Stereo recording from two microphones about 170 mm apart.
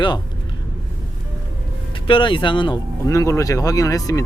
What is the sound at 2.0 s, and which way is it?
Speech, 30° left (ahead or behind).